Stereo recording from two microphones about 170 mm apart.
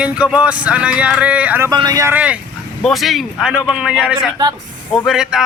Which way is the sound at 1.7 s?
20° right (ahead or behind).